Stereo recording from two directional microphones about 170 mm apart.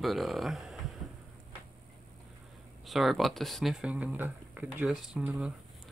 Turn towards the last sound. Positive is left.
turn(degrees=-5)  # may be behind; listen again after turning